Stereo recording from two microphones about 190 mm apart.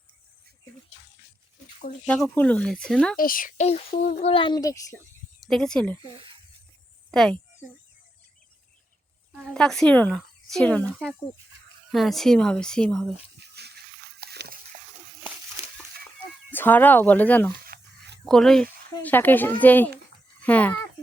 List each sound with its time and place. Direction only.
2.0 s speech: 5° left (ahead or behind)
3.2 s speech: 45° left (ahead or behind)
3.7 s speech: 30° left (ahead or behind); by 4.9 s 15° left (ahead or behind)
5.4 s speech: centre (ahead or behind)
7.1 s speech: centre (ahead or behind)
9.6 s speech: 5° left (ahead or behind)
13.5 s a sound: 60° right (ahead or behind)
14.2 s dog: 55° right (ahead or behind)
16.5 s speech: 10° left (ahead or behind)
17.7 s a sound: 60° right (ahead or behind)
18.3 s speech: centre (ahead or behind)